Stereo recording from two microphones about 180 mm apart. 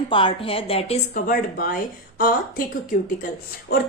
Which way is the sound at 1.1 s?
55° left (ahead or behind).